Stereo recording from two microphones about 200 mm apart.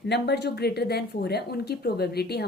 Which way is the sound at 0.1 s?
55° left (ahead or behind).